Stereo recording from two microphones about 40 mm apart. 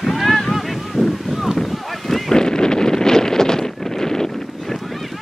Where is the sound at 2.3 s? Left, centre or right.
Centre.